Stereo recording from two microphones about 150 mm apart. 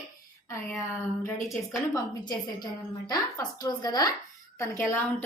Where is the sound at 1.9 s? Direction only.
25° left (ahead or behind).